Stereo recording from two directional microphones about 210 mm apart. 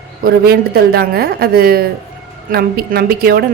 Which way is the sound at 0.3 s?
45° right (ahead or behind).